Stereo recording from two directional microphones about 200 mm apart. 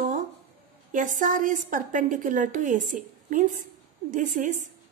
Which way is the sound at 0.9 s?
40° right (ahead or behind).